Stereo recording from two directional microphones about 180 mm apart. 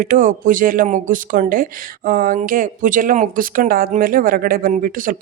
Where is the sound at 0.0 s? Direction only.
45° right (ahead or behind).